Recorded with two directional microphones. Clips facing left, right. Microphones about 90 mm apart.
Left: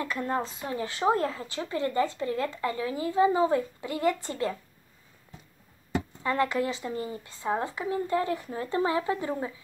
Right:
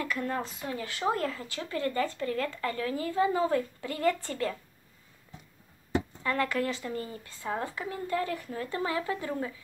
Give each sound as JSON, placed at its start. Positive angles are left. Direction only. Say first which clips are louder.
{"t": 0.0, "sound": "a woman's voice", "louder": "left 2 dB", "side_deg": 25}
{"t": 6.2, "sound": "a woman's voice", "louder": "left 4 dB", "side_deg": 20}